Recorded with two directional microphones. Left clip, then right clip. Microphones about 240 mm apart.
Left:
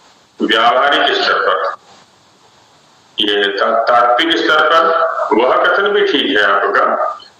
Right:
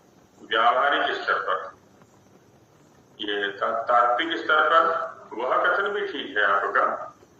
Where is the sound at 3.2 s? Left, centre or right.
Left.